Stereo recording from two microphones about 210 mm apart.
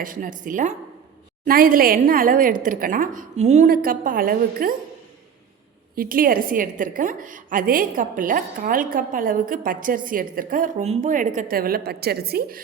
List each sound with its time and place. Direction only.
0.0 s a woman's voice: 40° right (ahead or behind)
6.0 s a woman's voice: 40° right (ahead or behind)